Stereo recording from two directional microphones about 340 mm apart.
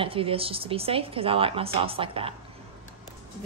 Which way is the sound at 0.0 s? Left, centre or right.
Centre.